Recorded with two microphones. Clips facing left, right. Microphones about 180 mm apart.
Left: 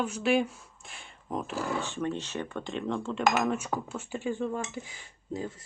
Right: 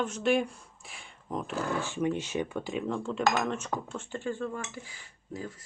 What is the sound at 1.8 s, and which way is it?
Speech, 10° right (ahead or behind).